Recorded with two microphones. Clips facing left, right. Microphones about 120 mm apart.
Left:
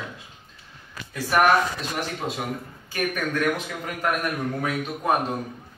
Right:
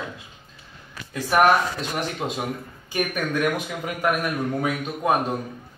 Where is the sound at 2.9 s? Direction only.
15° right (ahead or behind).